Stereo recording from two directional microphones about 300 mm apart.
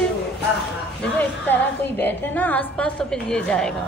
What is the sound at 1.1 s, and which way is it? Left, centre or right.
A woman's voice, centre.